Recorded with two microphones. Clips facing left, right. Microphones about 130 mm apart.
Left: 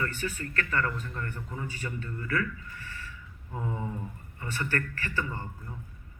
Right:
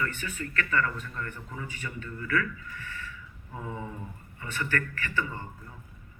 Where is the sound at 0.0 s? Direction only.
35° left (ahead or behind).